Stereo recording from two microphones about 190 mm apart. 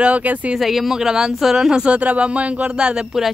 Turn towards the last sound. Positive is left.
turn(degrees=-5)  # may be behind; listen again after turning